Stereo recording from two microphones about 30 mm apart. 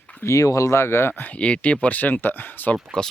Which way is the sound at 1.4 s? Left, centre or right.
Left.